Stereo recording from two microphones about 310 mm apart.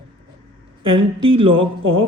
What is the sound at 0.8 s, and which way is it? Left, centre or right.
Speech, centre.